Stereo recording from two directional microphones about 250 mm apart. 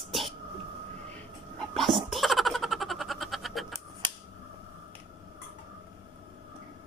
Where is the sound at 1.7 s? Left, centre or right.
Centre.